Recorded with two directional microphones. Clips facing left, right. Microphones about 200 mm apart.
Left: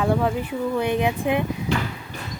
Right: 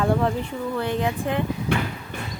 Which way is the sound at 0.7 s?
15° left (ahead or behind).